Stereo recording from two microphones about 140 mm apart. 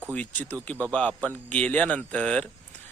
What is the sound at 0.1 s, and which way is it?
Speech, 10° left (ahead or behind).